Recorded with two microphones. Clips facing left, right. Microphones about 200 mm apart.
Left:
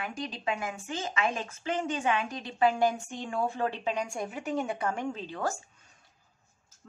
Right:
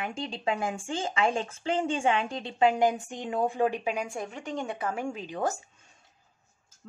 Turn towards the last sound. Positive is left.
turn(degrees=-15)  # may be behind; listen again after turning